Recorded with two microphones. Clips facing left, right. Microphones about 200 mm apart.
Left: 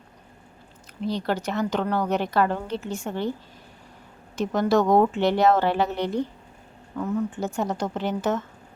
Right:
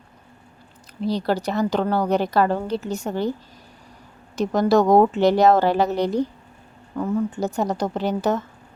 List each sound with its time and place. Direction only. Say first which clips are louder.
1.0 s a woman's voice: right 4 dB; 35° right (ahead or behind)
4.4 s a woman's voice: right 3 dB; 35° right (ahead or behind)